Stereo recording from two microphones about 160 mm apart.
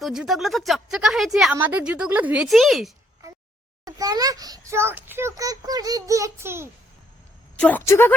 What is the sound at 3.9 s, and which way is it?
A child's voice, 25° right (ahead or behind).